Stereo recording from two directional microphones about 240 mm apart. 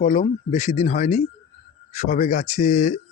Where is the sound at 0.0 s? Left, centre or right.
Left.